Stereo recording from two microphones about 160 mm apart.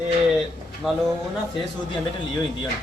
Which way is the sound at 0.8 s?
Centre (ahead or behind).